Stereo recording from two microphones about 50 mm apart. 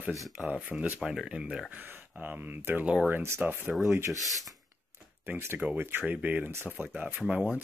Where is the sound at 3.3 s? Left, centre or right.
Right.